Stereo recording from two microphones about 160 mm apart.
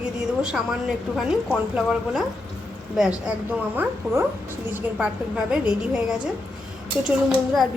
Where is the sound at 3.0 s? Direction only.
5° right (ahead or behind).